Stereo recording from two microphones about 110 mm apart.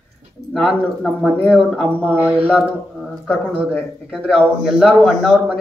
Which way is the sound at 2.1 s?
15° right (ahead or behind).